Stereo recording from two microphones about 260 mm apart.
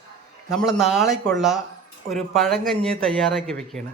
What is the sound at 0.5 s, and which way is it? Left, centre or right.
Speech, centre.